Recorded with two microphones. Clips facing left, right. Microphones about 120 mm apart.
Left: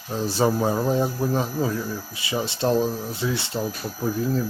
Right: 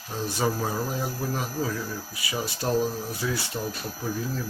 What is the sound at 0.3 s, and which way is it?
Speech, 30° left (ahead or behind).